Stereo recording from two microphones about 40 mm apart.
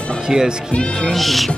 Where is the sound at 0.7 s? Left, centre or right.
Left.